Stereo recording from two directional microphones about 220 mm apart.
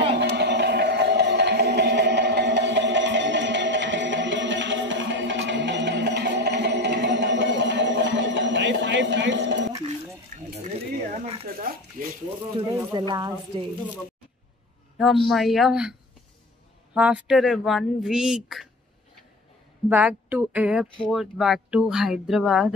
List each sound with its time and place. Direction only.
0.2 s music: 50° right (ahead or behind)
10.3 s a sound: 40° right (ahead or behind)
12.5 s speech: 15° right (ahead or behind)
15.0 s speech: centre (ahead or behind)
19.9 s speech: 10° right (ahead or behind)